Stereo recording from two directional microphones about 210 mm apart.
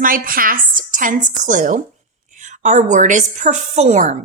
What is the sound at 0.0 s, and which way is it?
A woman's voice, 40° right (ahead or behind).